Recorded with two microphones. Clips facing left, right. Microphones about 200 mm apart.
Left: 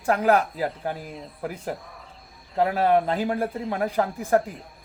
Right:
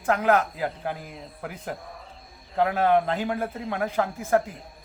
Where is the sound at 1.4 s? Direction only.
30° left (ahead or behind).